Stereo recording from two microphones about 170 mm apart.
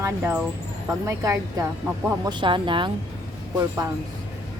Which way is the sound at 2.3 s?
30° right (ahead or behind).